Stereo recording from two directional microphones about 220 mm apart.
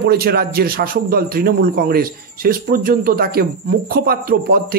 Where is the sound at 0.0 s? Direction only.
45° right (ahead or behind).